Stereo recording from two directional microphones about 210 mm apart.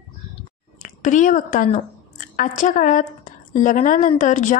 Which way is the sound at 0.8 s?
35° left (ahead or behind).